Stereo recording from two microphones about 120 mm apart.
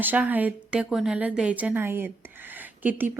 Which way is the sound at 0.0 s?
15° right (ahead or behind).